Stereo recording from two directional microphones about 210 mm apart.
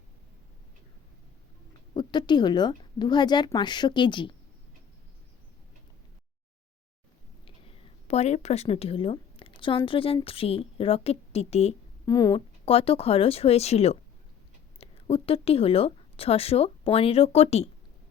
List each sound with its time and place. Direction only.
1.9 s a woman's voice: 20° left (ahead or behind)
7.4 s a woman's voice: 25° left (ahead or behind)
12.0 s a woman's voice: 20° left (ahead or behind)